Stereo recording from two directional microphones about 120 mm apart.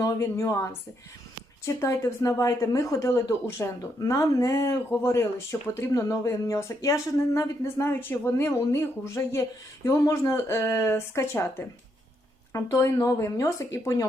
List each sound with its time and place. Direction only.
0.0 s speech: 25° left (ahead or behind)